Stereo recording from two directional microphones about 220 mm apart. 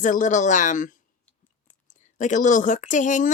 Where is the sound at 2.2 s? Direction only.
35° left (ahead or behind).